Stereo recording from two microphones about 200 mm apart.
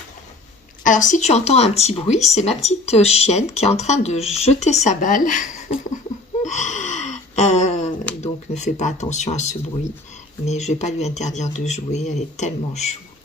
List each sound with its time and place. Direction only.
0.9 s speech: 40° left (ahead or behind)
6.4 s gasp: 35° left (ahead or behind)
8.2 s speech: 35° left (ahead or behind)